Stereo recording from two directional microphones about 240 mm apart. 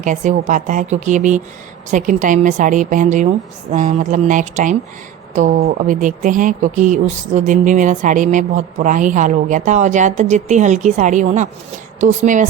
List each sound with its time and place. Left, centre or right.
0.0 s speech: right